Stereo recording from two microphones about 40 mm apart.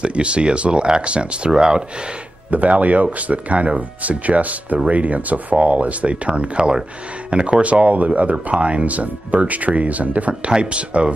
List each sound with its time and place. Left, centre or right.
0.0 s speech: right
2.5 s speech: right
10.5 s speech: right